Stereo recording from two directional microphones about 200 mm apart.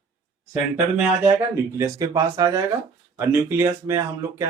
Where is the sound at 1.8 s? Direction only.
15° right (ahead or behind).